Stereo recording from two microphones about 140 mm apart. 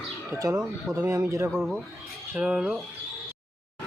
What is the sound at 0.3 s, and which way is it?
Speech, 25° right (ahead or behind).